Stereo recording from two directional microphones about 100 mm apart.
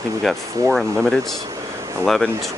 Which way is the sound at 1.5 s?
30° right (ahead or behind).